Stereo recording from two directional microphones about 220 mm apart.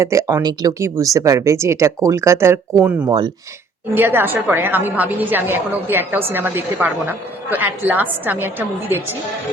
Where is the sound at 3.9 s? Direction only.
10° right (ahead or behind).